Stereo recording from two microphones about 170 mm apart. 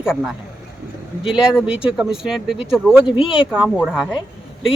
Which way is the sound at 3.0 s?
30° left (ahead or behind).